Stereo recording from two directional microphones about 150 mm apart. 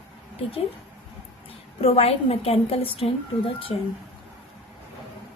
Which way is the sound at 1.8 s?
40° left (ahead or behind).